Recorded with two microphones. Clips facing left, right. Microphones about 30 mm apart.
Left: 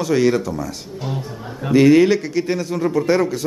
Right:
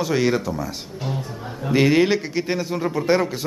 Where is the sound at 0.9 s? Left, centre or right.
Centre.